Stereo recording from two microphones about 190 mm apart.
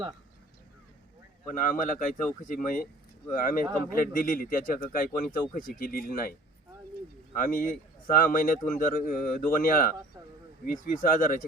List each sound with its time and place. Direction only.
1.5 s speech: 45° left (ahead or behind)
7.3 s speech: 45° left (ahead or behind)